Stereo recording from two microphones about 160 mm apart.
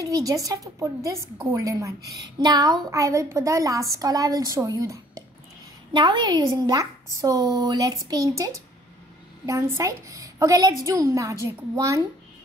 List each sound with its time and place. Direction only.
0.0 s a woman's voice: 20° right (ahead or behind)